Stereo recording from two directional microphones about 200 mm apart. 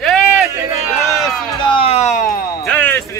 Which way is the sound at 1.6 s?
25° left (ahead or behind).